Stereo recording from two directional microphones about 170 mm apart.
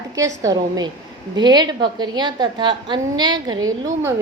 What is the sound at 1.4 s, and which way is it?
A woman's voice, 25° right (ahead or behind).